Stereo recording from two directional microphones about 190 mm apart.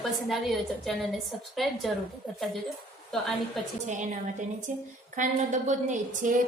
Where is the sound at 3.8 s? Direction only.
40° right (ahead or behind).